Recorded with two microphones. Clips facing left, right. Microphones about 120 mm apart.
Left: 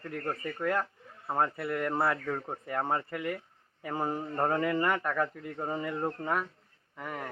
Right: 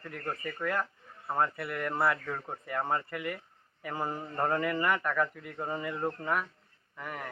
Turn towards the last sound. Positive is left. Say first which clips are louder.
# left 2 dB
turn(degrees=20)  # may be behind; listen again after turning